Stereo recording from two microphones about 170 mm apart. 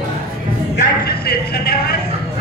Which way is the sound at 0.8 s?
65° left (ahead or behind).